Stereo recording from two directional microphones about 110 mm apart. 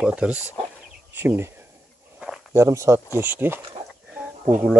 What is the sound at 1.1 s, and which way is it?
Speech, 20° right (ahead or behind).